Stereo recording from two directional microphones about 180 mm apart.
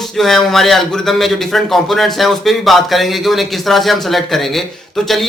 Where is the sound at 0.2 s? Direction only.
Centre (ahead or behind).